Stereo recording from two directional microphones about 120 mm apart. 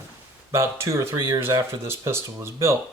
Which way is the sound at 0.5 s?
25° right (ahead or behind).